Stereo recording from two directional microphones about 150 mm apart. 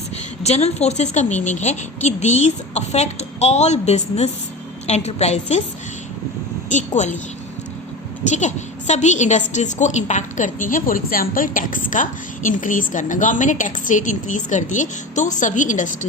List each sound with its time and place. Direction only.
0.4 s a woman's voice: 45° left (ahead or behind)
6.7 s a woman's voice: 55° left (ahead or behind)
8.3 s a woman's voice: 50° left (ahead or behind)